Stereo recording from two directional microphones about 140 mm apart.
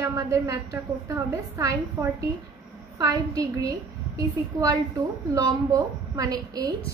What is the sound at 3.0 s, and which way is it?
A woman's voice, 25° right (ahead or behind).